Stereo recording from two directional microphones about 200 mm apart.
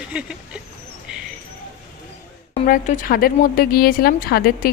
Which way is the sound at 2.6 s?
40° left (ahead or behind).